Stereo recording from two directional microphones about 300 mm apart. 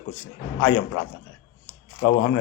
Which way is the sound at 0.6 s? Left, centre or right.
Left.